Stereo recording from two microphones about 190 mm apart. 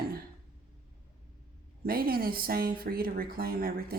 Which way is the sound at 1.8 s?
50° right (ahead or behind).